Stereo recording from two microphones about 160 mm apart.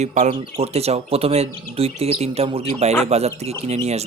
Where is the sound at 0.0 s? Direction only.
50° right (ahead or behind).